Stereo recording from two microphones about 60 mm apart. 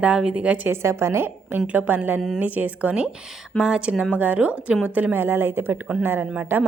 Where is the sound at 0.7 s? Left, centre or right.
Right.